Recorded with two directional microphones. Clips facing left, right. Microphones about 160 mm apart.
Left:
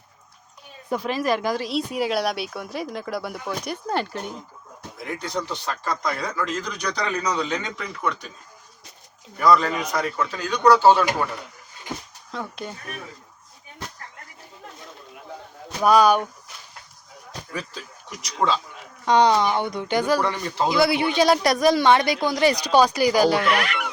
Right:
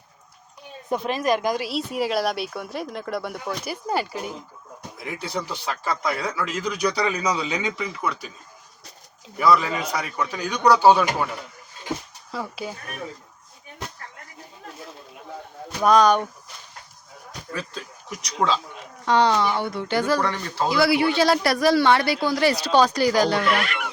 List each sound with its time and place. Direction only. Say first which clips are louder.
0.9 s speech: right 1 dB; 20° right (ahead or behind)
1.6 s speech: left 1 dB; centre (ahead or behind)
9.4 s speech: left 1 dB; 5° right (ahead or behind)
12.3 s speech: right 1 dB; 5° right (ahead or behind)
15.8 s speech: even; 5° left (ahead or behind)
18.2 s speech: even; centre (ahead or behind)
19.0 s speech: left 2 dB; 15° left (ahead or behind)